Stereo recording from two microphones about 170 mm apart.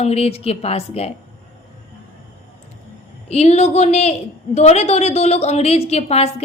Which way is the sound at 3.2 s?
40° left (ahead or behind).